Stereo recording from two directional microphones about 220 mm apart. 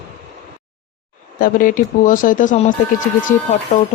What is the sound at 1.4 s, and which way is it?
Speech, 40° left (ahead or behind).